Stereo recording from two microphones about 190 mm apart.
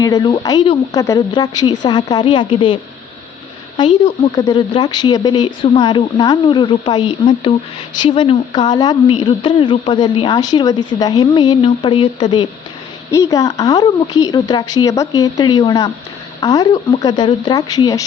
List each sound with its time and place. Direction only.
0.0 s a woman's voice: 20° left (ahead or behind)